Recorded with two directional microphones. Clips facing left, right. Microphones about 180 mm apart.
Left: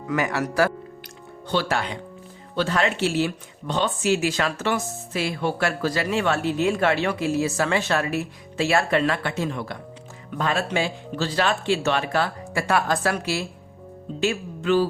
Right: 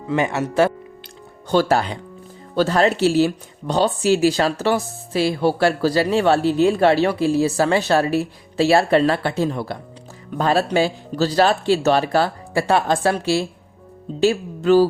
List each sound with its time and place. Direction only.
0.1 s speech: 25° right (ahead or behind)
1.5 s speech: 40° right (ahead or behind)